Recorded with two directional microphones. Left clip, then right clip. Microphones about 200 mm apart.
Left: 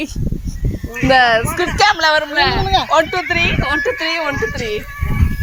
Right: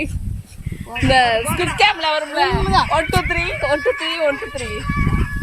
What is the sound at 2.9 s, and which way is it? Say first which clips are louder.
Speech: left 4 dB; 30° left (ahead or behind).